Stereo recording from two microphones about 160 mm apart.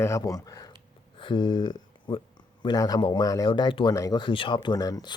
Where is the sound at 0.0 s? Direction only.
20° left (ahead or behind).